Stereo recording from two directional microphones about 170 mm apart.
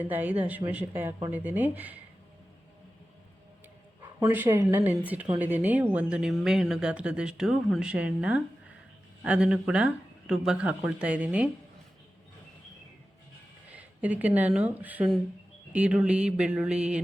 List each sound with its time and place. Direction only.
0.0 s speech: 10° right (ahead or behind)
4.3 s speech: 10° right (ahead or behind)
13.7 s speech: 10° right (ahead or behind)
15.7 s a sound: 5° right (ahead or behind)